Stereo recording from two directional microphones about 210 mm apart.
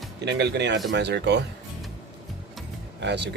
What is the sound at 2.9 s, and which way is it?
Speech, 55° right (ahead or behind).